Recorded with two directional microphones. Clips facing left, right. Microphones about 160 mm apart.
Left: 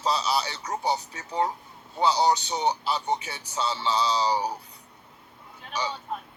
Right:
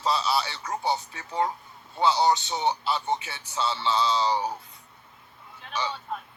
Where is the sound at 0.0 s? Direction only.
15° left (ahead or behind).